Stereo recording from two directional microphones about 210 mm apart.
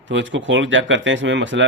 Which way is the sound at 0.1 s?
60° right (ahead or behind).